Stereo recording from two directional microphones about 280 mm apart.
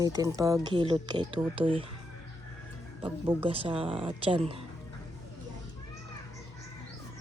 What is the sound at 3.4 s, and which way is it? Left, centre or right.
A woman's voice, centre.